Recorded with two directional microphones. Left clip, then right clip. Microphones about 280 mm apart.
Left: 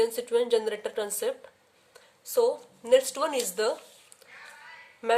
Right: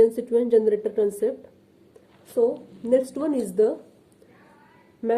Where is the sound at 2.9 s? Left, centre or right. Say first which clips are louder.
Right 1 dB; left.